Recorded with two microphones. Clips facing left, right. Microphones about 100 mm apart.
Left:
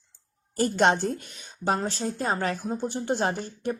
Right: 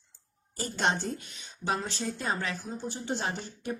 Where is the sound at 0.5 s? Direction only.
55° left (ahead or behind).